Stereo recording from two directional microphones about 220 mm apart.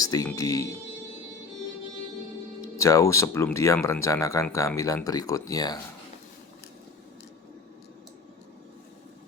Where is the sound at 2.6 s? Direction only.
15° left (ahead or behind).